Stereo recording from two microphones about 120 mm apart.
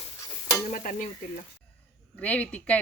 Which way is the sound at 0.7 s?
90° left.